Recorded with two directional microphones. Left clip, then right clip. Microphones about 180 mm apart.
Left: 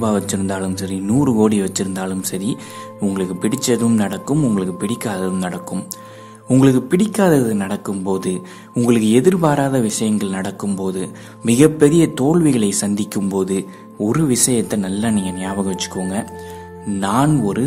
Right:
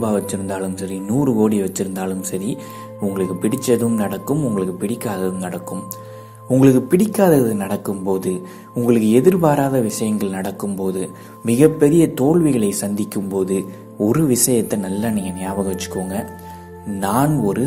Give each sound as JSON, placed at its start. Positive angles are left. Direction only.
{"t": 0.0, "sound": "speech", "side_deg": 20}
{"t": 6.6, "sound": "speech", "side_deg": 15}